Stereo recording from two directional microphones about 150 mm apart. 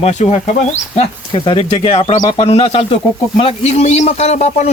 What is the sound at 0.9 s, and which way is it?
Speech, 35° left (ahead or behind).